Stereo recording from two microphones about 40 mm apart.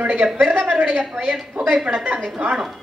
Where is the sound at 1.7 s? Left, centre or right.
Right.